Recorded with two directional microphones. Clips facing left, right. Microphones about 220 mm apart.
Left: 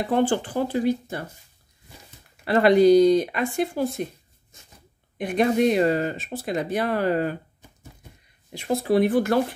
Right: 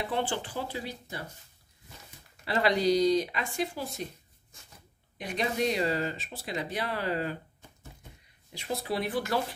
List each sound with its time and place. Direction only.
0.0 s speech: 45° left (ahead or behind)
2.4 s speech: 55° left (ahead or behind)
5.1 s speech: 55° left (ahead or behind)
8.5 s speech: 50° left (ahead or behind)